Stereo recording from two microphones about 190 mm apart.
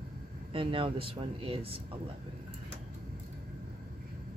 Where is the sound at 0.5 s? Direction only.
30° right (ahead or behind).